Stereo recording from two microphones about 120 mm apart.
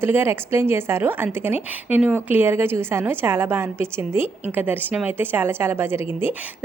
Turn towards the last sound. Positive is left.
turn(degrees=-20)  # may be behind; listen again after turning